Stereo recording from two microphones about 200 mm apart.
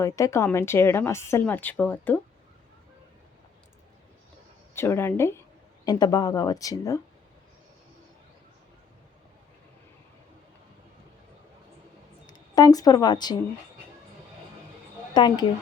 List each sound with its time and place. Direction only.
0.0 s speech: 15° left (ahead or behind)
4.7 s speech: 10° left (ahead or behind)
12.2 s a woman's voice: 20° left (ahead or behind)
15.1 s speech: 20° left (ahead or behind)